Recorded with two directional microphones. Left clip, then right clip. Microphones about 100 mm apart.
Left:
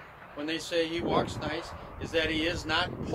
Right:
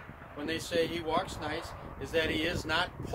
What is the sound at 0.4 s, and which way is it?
Speech, 55° right (ahead or behind).